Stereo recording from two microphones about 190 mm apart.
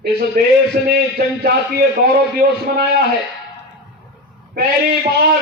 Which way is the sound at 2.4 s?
50° right (ahead or behind).